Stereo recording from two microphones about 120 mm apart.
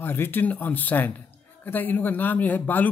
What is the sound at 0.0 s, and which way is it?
Speech, 15° left (ahead or behind).